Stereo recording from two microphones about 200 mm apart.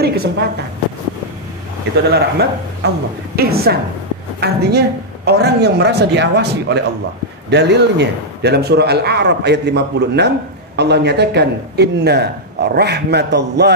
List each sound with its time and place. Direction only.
0.0 s a woman's voice: 55° right (ahead or behind)
2.0 s a woman's voice: 55° right (ahead or behind)